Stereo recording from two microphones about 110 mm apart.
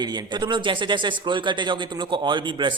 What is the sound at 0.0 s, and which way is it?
Speech, 40° right (ahead or behind).